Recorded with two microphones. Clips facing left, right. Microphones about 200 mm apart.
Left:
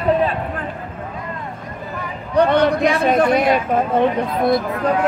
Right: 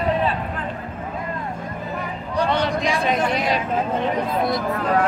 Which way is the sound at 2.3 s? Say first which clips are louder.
Left 7 dB; 55° left (ahead or behind).